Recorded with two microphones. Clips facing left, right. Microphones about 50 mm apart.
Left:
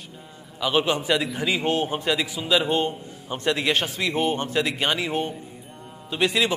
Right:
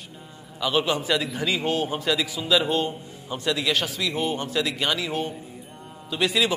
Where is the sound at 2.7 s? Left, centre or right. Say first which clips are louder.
Left 1 dB; left.